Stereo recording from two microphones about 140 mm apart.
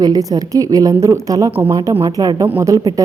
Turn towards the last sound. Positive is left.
turn(degrees=-25)  # may be behind; listen again after turning